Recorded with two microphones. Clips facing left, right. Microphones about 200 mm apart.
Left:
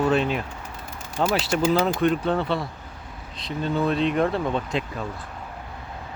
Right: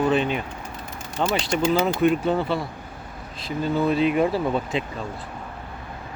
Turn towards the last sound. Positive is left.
turn(degrees=0)  # may be behind; listen again after turning